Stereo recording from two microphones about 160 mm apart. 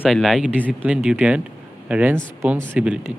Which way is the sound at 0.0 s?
5° right (ahead or behind).